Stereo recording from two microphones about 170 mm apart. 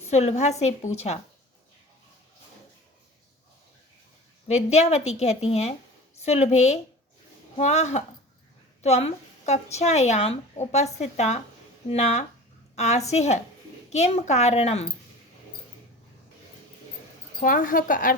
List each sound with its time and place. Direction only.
0.1 s speech: 40° left (ahead or behind)
4.4 s speech: 40° left (ahead or behind)
17.4 s a woman's voice: 55° left (ahead or behind)